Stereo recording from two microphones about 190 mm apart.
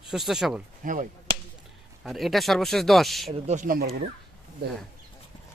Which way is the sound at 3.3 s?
35° right (ahead or behind).